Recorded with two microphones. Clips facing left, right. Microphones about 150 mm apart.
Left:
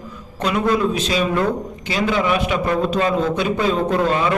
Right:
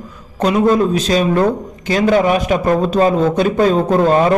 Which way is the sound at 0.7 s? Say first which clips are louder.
Right 5 dB; 40° right (ahead or behind).